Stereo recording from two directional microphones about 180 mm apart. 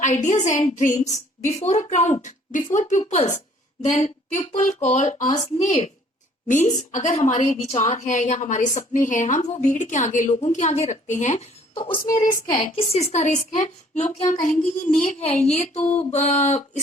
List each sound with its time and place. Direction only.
0.0 s a woman's voice: 45° left (ahead or behind); by 12.2 s 25° left (ahead or behind)
12.2 s a woman's voice: 50° left (ahead or behind)
12.7 s a woman's voice: 35° left (ahead or behind)